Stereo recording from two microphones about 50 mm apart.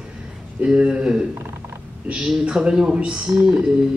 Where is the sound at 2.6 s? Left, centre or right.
Centre.